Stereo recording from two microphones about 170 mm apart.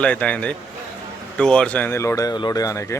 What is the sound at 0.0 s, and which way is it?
Speech, 10° left (ahead or behind).